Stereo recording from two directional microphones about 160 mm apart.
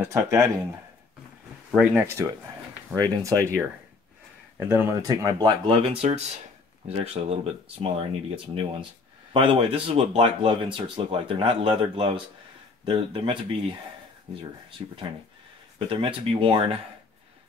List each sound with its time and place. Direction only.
0.0 s speech: 20° right (ahead or behind)
2.0 s speech: 15° right (ahead or behind)
4.6 s speech: 15° right (ahead or behind); by 13.5 s 30° right (ahead or behind)
14.8 s speech: 25° right (ahead or behind)